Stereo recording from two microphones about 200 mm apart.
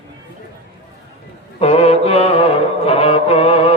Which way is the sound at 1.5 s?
30° left (ahead or behind).